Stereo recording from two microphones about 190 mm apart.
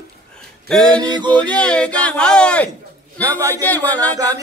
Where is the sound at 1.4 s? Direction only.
5° left (ahead or behind).